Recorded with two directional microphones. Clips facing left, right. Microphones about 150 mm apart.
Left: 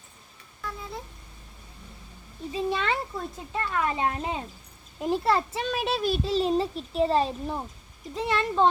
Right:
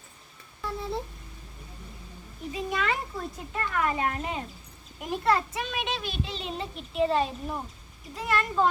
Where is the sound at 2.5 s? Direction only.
30° left (ahead or behind).